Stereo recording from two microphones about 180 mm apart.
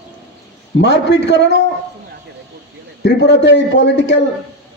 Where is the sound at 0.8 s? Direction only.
75° left (ahead or behind).